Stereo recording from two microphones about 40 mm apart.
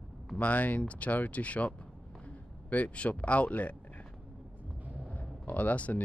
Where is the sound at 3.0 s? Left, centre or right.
Left.